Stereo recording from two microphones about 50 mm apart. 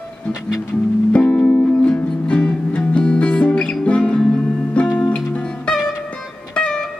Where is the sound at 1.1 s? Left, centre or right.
Left.